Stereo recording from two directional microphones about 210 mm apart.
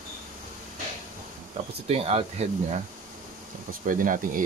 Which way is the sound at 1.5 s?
30° right (ahead or behind).